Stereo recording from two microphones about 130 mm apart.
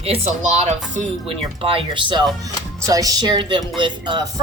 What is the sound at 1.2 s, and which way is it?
Speech, 45° right (ahead or behind).